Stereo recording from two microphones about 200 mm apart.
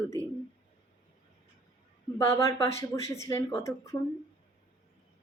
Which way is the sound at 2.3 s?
15° left (ahead or behind).